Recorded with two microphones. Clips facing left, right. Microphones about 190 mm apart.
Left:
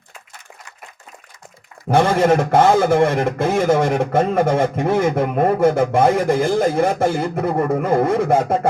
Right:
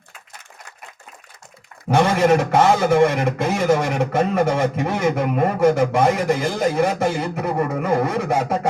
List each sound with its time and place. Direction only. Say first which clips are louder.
1.9 s a man's voice: left 1 dB; 55° left (ahead or behind)